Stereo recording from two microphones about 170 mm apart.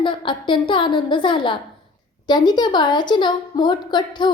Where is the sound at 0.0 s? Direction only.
30° left (ahead or behind).